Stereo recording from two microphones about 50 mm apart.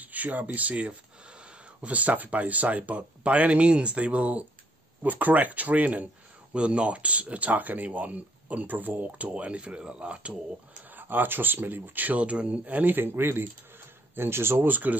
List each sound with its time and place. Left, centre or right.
0.0 s speech: right
10.9 s speech: right
14.7 s speech: right